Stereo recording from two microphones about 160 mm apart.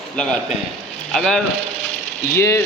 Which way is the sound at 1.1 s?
5° left (ahead or behind).